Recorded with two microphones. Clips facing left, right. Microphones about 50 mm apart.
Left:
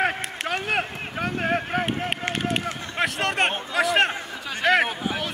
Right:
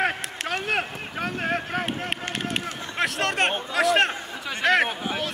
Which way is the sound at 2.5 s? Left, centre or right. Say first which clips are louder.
Left 2 dB; centre.